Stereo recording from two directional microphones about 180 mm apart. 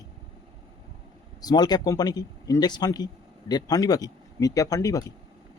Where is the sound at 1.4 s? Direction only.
20° left (ahead or behind).